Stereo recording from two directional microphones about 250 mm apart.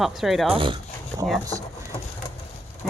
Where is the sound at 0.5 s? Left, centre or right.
Centre.